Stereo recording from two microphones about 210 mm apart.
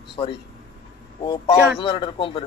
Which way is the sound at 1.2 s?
20° left (ahead or behind).